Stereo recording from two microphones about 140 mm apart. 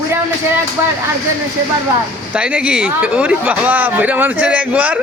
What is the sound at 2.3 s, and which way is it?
A woman's voice, 10° right (ahead or behind).